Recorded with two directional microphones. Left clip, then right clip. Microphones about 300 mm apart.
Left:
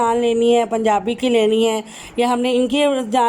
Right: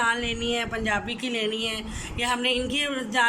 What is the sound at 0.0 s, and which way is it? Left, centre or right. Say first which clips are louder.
A woman's voice: left 9 dB; centre.